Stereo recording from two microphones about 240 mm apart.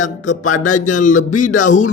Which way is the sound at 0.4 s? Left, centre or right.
Left.